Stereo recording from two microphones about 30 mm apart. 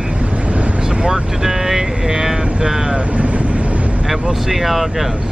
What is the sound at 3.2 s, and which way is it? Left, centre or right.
Vehicle, right.